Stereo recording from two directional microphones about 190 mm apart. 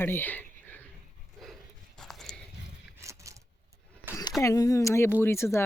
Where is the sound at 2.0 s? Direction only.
Centre (ahead or behind).